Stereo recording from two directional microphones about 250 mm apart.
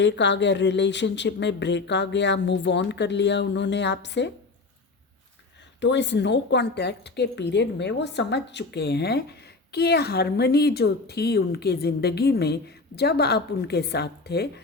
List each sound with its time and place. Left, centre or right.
0.0 s speech: left
5.8 s speech: left